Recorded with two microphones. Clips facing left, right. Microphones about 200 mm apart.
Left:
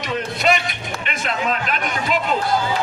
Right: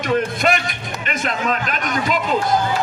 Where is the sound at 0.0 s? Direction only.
50° right (ahead or behind).